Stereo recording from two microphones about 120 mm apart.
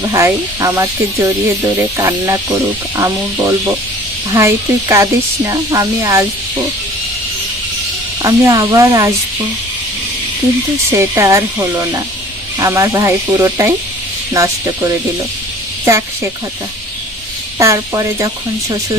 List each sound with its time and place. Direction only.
0.1 s speech: 25° right (ahead or behind)
8.2 s speech: 30° right (ahead or behind)
10.9 s speech: 25° right (ahead or behind)
17.6 s speech: 25° right (ahead or behind)